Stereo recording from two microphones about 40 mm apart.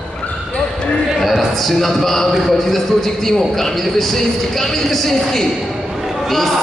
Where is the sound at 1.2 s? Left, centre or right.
Centre.